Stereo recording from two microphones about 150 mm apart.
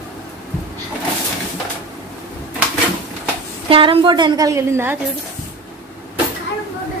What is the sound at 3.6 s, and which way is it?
A woman's voice, 35° right (ahead or behind).